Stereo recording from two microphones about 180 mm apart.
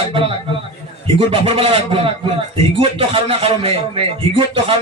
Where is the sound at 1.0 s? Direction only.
30° right (ahead or behind).